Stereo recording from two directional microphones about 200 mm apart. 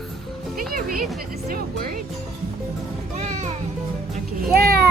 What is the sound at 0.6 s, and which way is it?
Speech, 45° right (ahead or behind).